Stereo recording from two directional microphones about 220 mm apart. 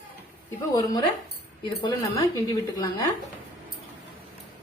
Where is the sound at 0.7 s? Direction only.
15° left (ahead or behind).